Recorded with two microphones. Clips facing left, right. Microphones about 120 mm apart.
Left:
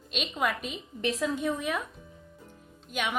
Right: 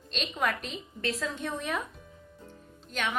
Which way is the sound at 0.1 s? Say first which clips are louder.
Left 1 dB; 5° left (ahead or behind).